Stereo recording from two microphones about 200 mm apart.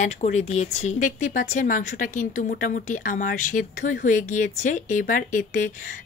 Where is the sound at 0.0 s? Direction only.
35° left (ahead or behind).